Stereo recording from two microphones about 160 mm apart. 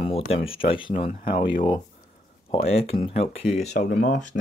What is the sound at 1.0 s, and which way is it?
Speech, 60° left (ahead or behind).